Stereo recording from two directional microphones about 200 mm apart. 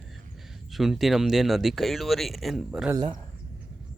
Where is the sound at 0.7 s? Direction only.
Centre (ahead or behind).